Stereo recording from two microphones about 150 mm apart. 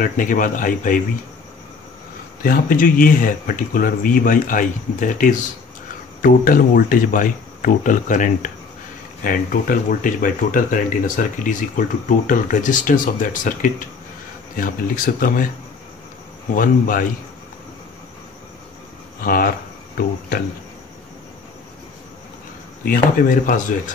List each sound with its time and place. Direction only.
0.0 s speech: 65° left (ahead or behind)
2.4 s speech: 75° left (ahead or behind)
16.5 s speech: 65° left (ahead or behind)
19.2 s speech: 75° left (ahead or behind)
20.0 s speech: 90° left
22.8 s speech: 65° left (ahead or behind)